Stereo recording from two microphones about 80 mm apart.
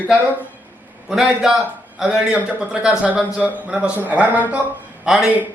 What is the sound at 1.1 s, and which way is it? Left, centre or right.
A man's voice, centre.